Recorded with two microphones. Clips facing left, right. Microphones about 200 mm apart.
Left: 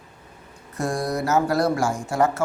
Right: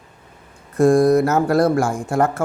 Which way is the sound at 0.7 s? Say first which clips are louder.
Right 12 dB; 55° right (ahead or behind).